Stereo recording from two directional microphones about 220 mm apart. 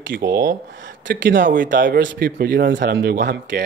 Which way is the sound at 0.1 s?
45° right (ahead or behind).